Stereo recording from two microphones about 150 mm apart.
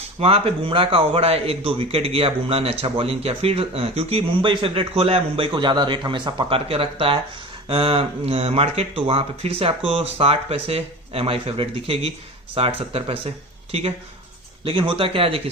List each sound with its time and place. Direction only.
0.2 s a man's voice: 40° right (ahead or behind)